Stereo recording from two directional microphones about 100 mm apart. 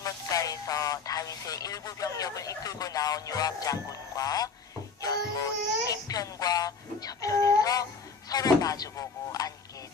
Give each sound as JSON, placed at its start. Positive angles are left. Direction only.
{"t": 0.0, "sound": "speech", "side_deg": 35}
{"t": 5.0, "sound": "music", "side_deg": 35}
{"t": 5.9, "sound": "speech", "side_deg": 40}